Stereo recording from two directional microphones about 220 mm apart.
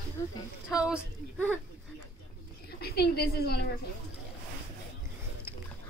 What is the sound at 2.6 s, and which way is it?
A woman's voice, 45° left (ahead or behind).